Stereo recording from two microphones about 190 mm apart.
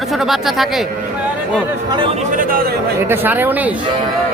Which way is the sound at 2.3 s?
50° right (ahead or behind).